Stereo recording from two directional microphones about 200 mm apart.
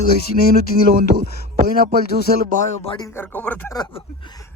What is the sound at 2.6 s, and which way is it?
Speech, 40° left (ahead or behind).